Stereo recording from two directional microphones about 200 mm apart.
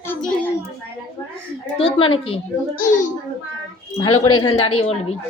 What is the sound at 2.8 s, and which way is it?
Speech, 40° left (ahead or behind).